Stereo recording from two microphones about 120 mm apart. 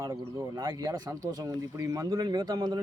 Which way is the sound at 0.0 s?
25° right (ahead or behind).